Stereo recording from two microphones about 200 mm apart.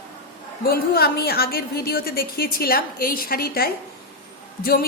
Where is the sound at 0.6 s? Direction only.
50° left (ahead or behind).